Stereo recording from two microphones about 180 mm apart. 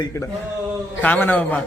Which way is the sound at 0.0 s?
15° left (ahead or behind).